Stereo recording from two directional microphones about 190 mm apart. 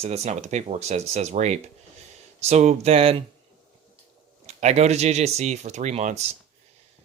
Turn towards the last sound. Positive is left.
turn(degrees=-35)  # may be behind; listen again after turning